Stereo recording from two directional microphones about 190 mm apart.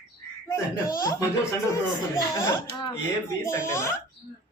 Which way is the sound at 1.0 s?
20° left (ahead or behind).